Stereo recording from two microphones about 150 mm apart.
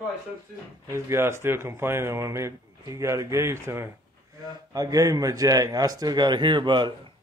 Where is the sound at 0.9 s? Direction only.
20° right (ahead or behind).